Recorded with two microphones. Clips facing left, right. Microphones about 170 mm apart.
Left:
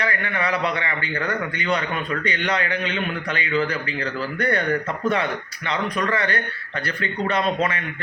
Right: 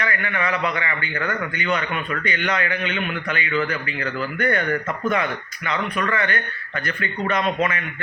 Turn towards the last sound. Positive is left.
turn(degrees=35)  # may be behind; listen again after turning